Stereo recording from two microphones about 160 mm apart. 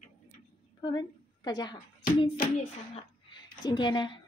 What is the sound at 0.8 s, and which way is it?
Speech, 25° left (ahead or behind).